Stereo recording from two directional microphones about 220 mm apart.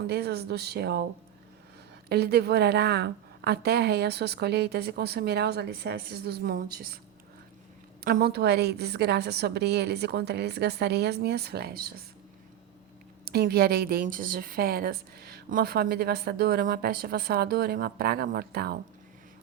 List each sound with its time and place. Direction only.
0.1 s a woman's voice: 45° right (ahead or behind)
2.0 s a woman's voice: 45° right (ahead or behind)
8.0 s a woman's voice: 45° right (ahead or behind)
13.2 s a woman's voice: 45° right (ahead or behind)